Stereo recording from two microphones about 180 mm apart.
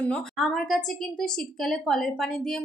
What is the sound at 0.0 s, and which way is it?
A woman's voice, 5° left (ahead or behind).